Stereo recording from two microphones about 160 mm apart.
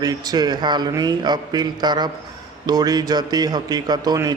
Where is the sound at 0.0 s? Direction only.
25° right (ahead or behind).